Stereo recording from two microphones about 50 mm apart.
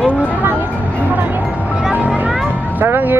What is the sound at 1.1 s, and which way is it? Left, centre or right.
Music, right.